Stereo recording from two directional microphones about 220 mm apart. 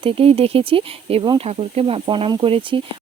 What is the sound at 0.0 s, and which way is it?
Speech, 25° right (ahead or behind).